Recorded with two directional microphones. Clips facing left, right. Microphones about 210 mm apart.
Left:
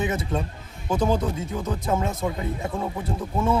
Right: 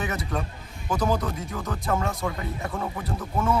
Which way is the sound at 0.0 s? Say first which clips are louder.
Left 4 dB; 25° left (ahead or behind).